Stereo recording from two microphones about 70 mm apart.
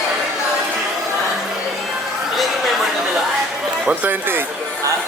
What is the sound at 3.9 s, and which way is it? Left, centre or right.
Speech, right.